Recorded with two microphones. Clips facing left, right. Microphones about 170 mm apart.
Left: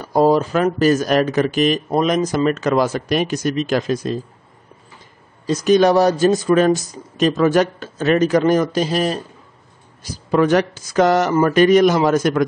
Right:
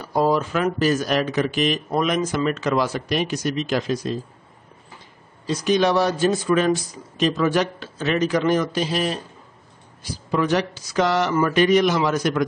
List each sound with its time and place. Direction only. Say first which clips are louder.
0.0 s speech: left 5 dB; 40° left (ahead or behind)
5.5 s speech: left 6 dB; 45° left (ahead or behind)
10.3 s speech: left 6 dB; 50° left (ahead or behind)